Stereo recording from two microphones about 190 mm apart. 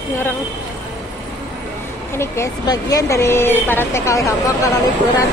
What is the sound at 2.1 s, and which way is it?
Speech, 15° left (ahead or behind).